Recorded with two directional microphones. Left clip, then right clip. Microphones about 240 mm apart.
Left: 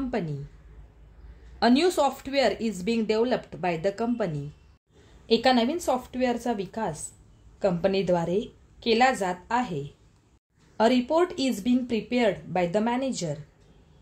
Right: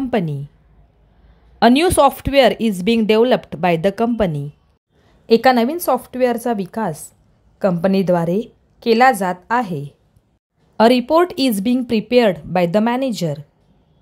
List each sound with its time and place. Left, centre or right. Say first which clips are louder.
0.1 s a woman's voice: right 11 dB; right
1.6 s speech: right 10 dB; right